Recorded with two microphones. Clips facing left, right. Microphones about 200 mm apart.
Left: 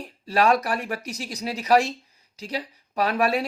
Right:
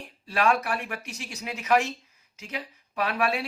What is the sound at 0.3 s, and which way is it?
Speech, 40° left (ahead or behind).